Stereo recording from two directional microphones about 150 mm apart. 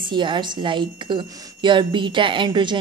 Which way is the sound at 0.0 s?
30° right (ahead or behind).